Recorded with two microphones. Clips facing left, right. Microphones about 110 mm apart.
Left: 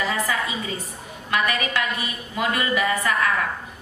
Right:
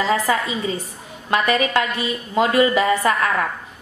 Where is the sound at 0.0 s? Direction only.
30° right (ahead or behind).